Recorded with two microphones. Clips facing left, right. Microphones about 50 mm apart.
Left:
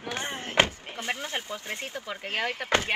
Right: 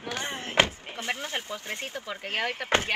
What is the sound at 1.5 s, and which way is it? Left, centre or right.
Speech, left.